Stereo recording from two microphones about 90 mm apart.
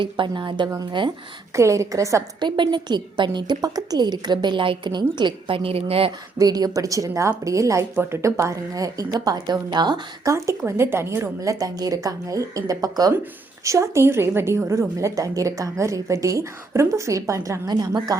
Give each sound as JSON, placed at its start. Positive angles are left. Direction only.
{"t": 0.0, "sound": "a woman's voice", "side_deg": -65}
{"t": 1.5, "sound": "a woman's voice", "side_deg": -35}
{"t": 2.4, "sound": "a woman's voice", "side_deg": -55}
{"t": 6.4, "sound": "a woman's voice", "side_deg": -45}
{"t": 10.2, "sound": "a woman's voice", "side_deg": -35}
{"t": 11.3, "sound": "a woman's voice", "side_deg": -40}
{"t": 13.7, "sound": "a woman's voice", "side_deg": -35}
{"t": 17.7, "sound": "a woman's voice", "side_deg": -50}